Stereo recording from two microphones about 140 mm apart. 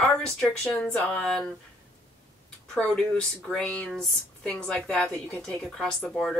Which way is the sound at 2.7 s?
5° left (ahead or behind).